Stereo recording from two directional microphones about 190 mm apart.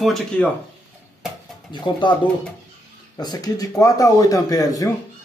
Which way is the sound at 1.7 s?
25° left (ahead or behind).